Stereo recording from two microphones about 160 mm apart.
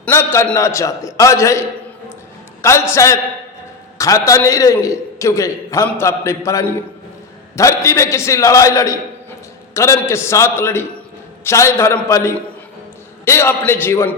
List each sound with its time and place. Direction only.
0.0 s a man's voice: 15° left (ahead or behind)